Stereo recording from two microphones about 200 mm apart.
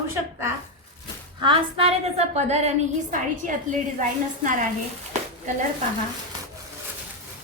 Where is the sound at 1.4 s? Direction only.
25° right (ahead or behind).